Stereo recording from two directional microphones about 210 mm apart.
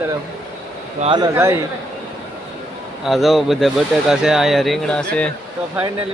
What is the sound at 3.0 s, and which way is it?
Speech, centre (ahead or behind).